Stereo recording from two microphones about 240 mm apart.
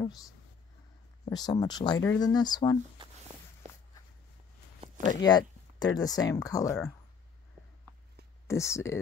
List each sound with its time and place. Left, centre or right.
1.3 s speech: centre
5.2 s a sound: centre
5.9 s speech: centre
8.5 s speech: centre